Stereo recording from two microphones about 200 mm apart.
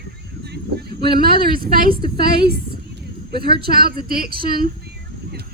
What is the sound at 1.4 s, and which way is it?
Speech, 50° right (ahead or behind).